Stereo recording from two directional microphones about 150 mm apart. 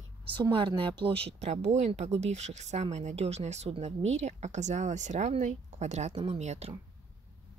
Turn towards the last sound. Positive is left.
turn(degrees=-45)  # may be behind; listen again after turning